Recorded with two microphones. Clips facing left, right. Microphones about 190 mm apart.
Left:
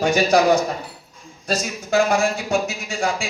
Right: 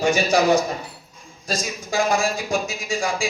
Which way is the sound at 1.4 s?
65° left (ahead or behind).